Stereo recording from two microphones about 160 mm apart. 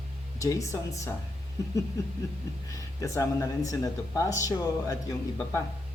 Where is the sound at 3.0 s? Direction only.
20° left (ahead or behind).